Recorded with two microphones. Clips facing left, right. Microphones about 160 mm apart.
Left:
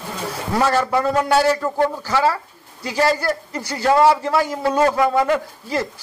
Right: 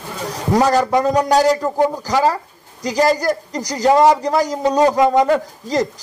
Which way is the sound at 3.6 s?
40° right (ahead or behind).